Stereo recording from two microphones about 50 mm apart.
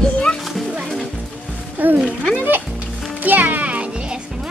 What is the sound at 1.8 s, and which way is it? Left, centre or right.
Music, right.